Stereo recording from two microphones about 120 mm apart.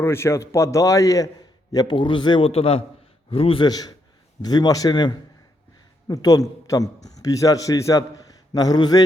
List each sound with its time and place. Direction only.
0.0 s a man's voice: 20° left (ahead or behind); by 3.7 s 50° left (ahead or behind)
3.7 s a man's voice: 35° left (ahead or behind)